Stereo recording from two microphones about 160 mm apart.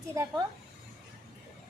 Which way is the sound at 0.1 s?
20° right (ahead or behind).